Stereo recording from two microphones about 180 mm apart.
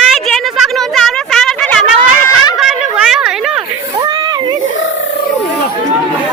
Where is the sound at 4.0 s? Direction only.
25° right (ahead or behind).